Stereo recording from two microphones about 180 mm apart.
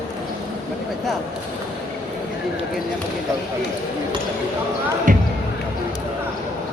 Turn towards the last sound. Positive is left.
turn(degrees=-45)  # may be behind; listen again after turning